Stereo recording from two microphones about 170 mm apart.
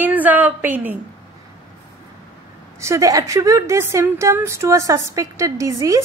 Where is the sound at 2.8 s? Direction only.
20° right (ahead or behind).